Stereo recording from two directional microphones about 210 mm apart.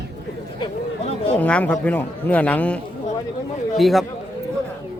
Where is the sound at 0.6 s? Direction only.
30° left (ahead or behind).